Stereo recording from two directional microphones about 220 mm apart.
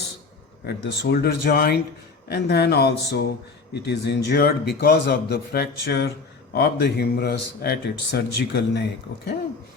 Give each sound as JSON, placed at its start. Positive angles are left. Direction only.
{"t": 0.6, "sound": "speech", "side_deg": 45}